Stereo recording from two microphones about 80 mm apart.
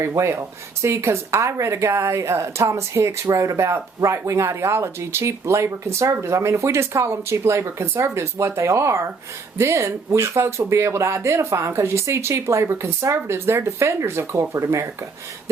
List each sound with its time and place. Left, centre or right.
0.0 s speech: right